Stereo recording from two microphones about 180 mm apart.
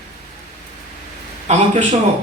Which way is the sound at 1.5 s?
40° right (ahead or behind).